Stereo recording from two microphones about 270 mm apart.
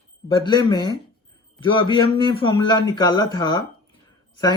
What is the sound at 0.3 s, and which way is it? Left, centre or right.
Speech, centre.